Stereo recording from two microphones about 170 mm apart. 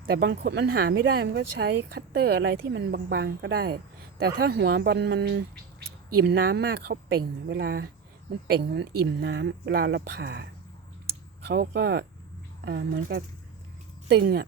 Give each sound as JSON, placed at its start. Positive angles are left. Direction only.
{"t": 0.1, "sound": "speech", "side_deg": -80}
{"t": 6.1, "sound": "speech", "side_deg": -65}
{"t": 8.4, "sound": "speech", "side_deg": -90}
{"t": 11.4, "sound": "speech", "side_deg": -70}
{"t": 14.1, "sound": "speech", "side_deg": -75}